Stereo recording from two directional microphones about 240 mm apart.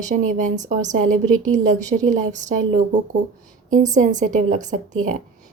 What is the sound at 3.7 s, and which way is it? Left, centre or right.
A woman's voice, right.